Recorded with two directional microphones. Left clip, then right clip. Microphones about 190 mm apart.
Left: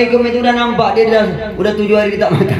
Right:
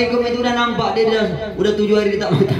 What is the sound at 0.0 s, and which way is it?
A man's voice, 45° right (ahead or behind).